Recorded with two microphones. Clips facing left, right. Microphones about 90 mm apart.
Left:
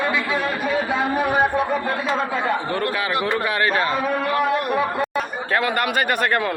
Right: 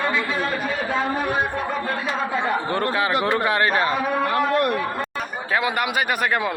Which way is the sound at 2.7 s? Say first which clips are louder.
Right 1 dB; 30° right (ahead or behind).